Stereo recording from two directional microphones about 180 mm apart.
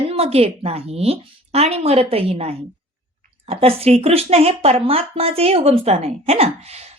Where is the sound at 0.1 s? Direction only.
35° right (ahead or behind).